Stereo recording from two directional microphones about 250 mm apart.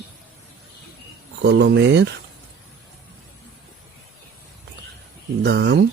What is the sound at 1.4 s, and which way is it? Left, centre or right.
Speech, right.